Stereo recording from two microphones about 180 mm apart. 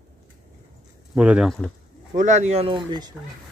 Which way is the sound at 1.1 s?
5° right (ahead or behind).